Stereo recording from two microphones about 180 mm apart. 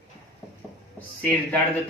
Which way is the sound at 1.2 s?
10° left (ahead or behind).